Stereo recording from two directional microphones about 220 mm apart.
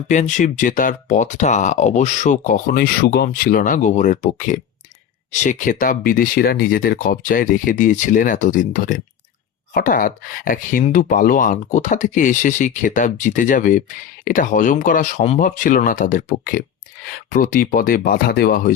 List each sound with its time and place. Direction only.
0.1 s speech: 35° left (ahead or behind)